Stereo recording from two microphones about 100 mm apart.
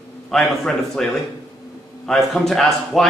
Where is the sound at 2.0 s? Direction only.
5° left (ahead or behind).